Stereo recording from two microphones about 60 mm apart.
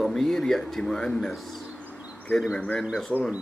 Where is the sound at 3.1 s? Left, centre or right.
Left.